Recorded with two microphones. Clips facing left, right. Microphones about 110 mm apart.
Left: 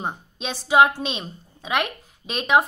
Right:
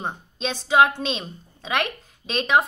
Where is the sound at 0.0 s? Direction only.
10° left (ahead or behind).